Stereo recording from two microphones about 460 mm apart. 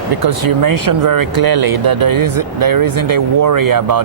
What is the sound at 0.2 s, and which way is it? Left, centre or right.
Speech, right.